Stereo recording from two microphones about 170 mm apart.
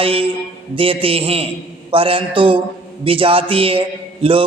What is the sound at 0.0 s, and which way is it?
A man's voice, 35° right (ahead or behind).